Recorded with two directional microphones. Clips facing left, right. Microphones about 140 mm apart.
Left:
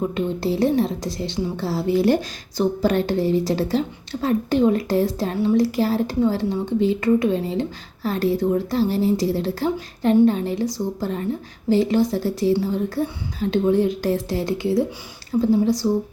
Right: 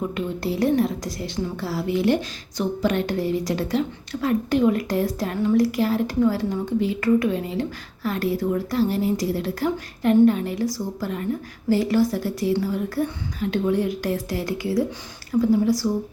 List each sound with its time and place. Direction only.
0.1 s a woman's voice: 25° left (ahead or behind)